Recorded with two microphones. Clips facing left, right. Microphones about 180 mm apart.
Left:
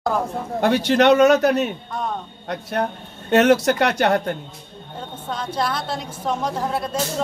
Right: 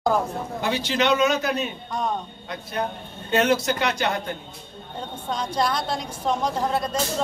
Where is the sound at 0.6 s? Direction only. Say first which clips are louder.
Left 8 dB; 60° left (ahead or behind).